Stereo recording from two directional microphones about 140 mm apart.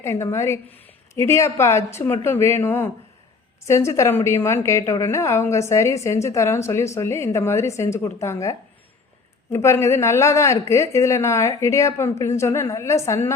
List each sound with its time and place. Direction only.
0.0 s speech: 20° left (ahead or behind)